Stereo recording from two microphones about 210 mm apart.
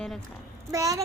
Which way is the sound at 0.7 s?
15° right (ahead or behind).